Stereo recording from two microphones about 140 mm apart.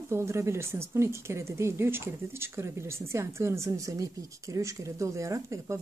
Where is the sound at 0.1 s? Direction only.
20° right (ahead or behind).